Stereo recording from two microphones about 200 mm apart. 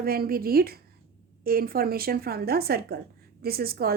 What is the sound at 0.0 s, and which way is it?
A woman's voice, 50° right (ahead or behind).